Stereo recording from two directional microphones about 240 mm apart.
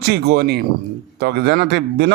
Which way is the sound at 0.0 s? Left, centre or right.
Right.